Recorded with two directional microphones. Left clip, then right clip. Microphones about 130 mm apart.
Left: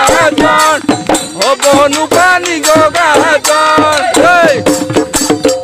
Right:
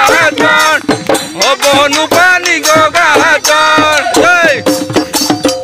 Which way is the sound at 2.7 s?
35° left (ahead or behind).